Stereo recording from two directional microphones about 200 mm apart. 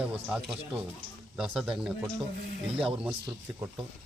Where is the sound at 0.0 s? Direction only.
5° right (ahead or behind).